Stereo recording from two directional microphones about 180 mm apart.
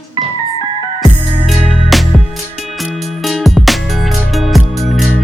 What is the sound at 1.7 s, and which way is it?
Music, centre (ahead or behind).